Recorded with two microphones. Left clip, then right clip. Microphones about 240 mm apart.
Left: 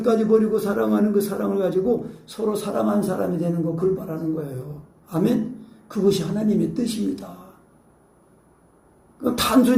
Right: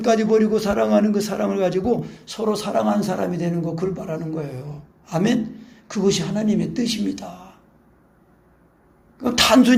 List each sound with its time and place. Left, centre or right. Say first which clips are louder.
0.0 s a man's voice: right 1 dB; right
9.1 s a woman's voice: right 5 dB; right